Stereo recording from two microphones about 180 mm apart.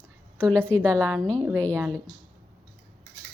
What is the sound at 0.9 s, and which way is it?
Speech, 20° right (ahead or behind).